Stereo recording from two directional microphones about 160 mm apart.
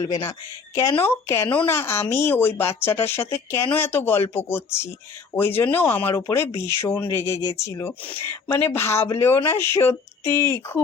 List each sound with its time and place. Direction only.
0.8 s speech: 15° left (ahead or behind)